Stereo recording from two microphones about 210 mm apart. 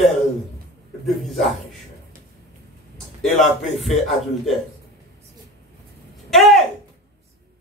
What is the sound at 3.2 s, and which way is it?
Speech, centre (ahead or behind).